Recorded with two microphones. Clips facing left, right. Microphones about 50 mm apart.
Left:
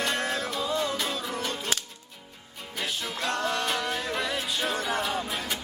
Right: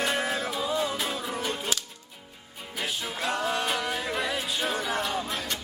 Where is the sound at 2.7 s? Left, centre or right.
Centre.